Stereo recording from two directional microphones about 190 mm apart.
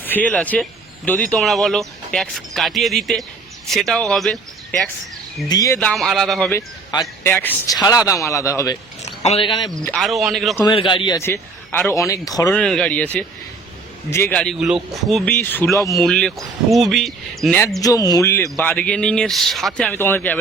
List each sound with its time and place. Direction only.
0.0 s speech: 10° left (ahead or behind)
5.5 s speech: 20° left (ahead or behind)
5.9 s speech: centre (ahead or behind)
6.5 s speech: 15° left (ahead or behind)
9.0 s speech: 35° left (ahead or behind)
9.7 s speech: 5° left (ahead or behind)
10.6 s a man's voice: 25° left (ahead or behind)
11.2 s speech: 10° left (ahead or behind)
12.5 s speech: 5° left (ahead or behind)
17.7 s speech: 20° left (ahead or behind)